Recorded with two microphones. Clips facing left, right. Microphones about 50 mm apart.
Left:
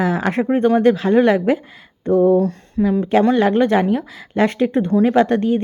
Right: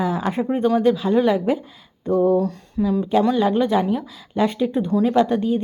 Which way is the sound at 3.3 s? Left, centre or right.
Left.